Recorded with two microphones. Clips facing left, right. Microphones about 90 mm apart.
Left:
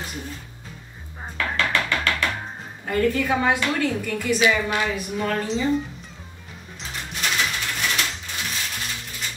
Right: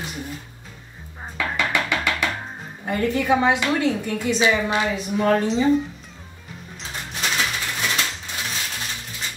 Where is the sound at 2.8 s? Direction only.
20° right (ahead or behind).